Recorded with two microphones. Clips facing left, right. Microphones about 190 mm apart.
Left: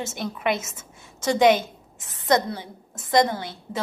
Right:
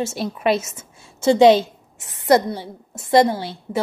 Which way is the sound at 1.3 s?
25° right (ahead or behind).